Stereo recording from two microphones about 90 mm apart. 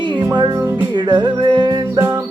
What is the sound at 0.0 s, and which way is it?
Music, 60° right (ahead or behind).